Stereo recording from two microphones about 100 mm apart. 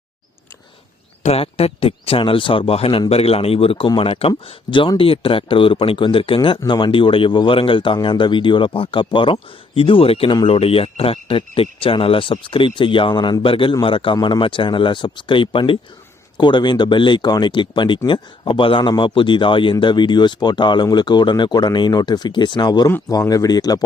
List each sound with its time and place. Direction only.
1.3 s speech: 90° left; by 3.0 s 75° left (ahead or behind)
3.1 s speech: 85° left; by 6.6 s 60° left (ahead or behind)
6.7 s speech: 50° left (ahead or behind)